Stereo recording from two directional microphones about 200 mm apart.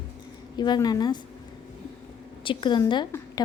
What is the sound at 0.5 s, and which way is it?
Speech, 20° left (ahead or behind).